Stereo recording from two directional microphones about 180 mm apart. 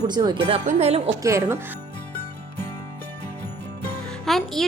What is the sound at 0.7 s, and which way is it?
Speech, 35° right (ahead or behind).